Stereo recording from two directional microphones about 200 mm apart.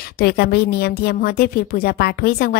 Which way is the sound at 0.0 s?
50° left (ahead or behind).